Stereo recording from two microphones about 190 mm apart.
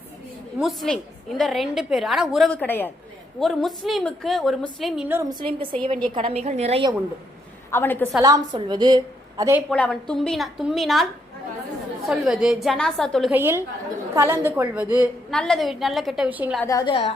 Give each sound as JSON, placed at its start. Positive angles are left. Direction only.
{"t": 0.6, "sound": "a woman's voice", "side_deg": 0}
{"t": 5.3, "sound": "a woman's voice", "side_deg": -25}
{"t": 7.7, "sound": "a woman's voice", "side_deg": 10}
{"t": 8.2, "sound": "a woman's voice", "side_deg": -20}
{"t": 9.4, "sound": "a woman's voice", "side_deg": -10}
{"t": 9.6, "sound": "a woman's voice", "side_deg": 5}
{"t": 13.3, "sound": "a woman's voice", "side_deg": -10}
{"t": 15.3, "sound": "a woman's voice", "side_deg": 5}
{"t": 16.6, "sound": "a woman's voice", "side_deg": 15}